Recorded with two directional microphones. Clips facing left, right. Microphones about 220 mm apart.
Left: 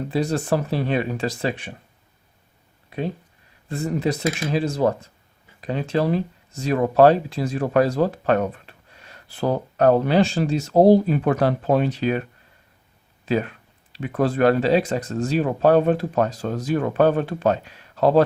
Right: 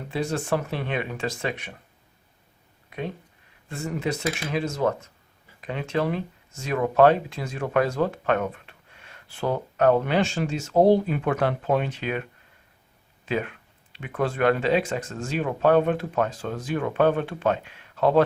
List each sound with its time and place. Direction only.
0.1 s speech: 35° left (ahead or behind)
2.9 s a sound: 30° left (ahead or behind)
3.7 s speech: 35° left (ahead or behind)